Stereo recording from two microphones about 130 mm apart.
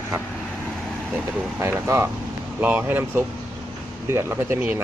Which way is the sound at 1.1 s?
15° right (ahead or behind).